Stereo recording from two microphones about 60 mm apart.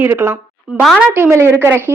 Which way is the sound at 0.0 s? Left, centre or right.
Right.